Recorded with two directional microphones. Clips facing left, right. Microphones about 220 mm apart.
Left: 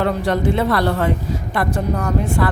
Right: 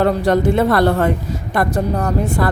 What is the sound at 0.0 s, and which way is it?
A man's voice, 45° right (ahead or behind).